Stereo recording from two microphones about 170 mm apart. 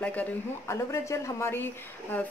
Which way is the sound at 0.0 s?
10° left (ahead or behind).